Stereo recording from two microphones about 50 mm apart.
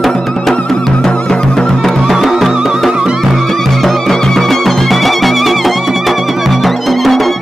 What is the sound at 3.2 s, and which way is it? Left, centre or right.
Music, centre.